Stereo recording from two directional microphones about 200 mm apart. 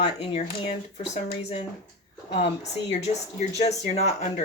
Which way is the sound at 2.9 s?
30° left (ahead or behind).